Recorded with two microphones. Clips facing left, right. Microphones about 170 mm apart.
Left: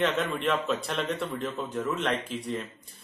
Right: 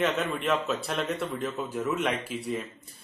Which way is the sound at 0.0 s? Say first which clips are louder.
Left 1 dB; 5° right (ahead or behind).